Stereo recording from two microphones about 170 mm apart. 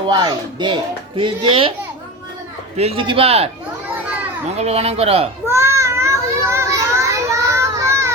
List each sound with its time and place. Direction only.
0.1 s a child's voice: 25° right (ahead or behind)
2.7 s speech: 35° right (ahead or behind)
5.5 s children playing: 15° right (ahead or behind)